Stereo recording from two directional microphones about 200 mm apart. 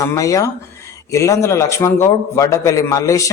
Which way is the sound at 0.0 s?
15° left (ahead or behind).